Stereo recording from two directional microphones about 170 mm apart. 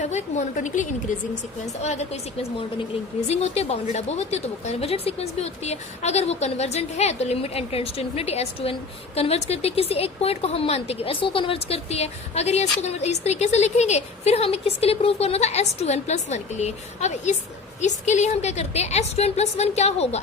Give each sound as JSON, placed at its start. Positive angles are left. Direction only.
{"t": 0.0, "sound": "a woman's voice", "side_deg": 45}
{"t": 3.2, "sound": "a woman's voice", "side_deg": 40}